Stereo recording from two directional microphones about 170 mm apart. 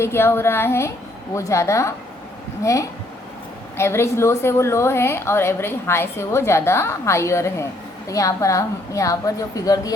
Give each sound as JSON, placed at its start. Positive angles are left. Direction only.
{"t": 0.0, "sound": "a woman's voice", "side_deg": 15}
{"t": 3.8, "sound": "a woman's voice", "side_deg": 15}